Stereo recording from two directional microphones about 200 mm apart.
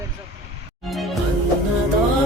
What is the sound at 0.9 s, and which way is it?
Music, centre (ahead or behind).